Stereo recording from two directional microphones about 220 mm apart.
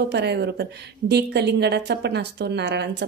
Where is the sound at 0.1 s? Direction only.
50° right (ahead or behind).